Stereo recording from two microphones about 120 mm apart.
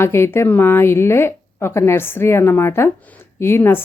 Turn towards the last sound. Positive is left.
turn(degrees=20)  # may be behind; listen again after turning